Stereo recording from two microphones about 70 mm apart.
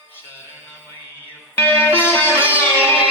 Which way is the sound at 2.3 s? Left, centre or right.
Right.